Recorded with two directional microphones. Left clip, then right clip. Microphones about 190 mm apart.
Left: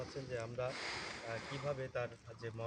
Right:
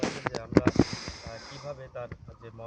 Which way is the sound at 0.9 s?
Centre (ahead or behind).